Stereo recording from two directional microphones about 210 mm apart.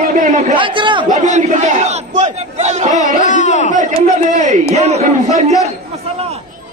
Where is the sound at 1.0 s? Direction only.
35° right (ahead or behind).